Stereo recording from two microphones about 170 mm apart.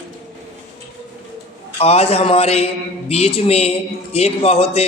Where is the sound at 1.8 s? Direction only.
35° left (ahead or behind).